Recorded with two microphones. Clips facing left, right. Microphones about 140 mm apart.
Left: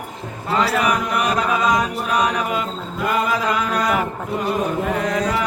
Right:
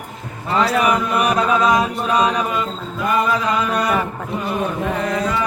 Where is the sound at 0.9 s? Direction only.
25° right (ahead or behind).